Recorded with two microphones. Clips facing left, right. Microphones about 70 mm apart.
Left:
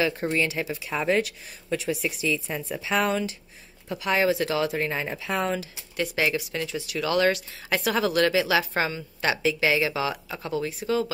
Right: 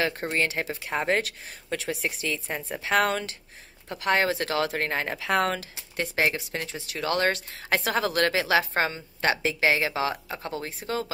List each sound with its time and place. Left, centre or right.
0.2 s speech: right
2.4 s speech: right
5.2 s speech: right
5.9 s speech: right